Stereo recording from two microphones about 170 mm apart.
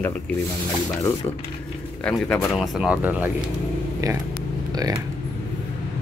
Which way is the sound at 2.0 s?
5° left (ahead or behind).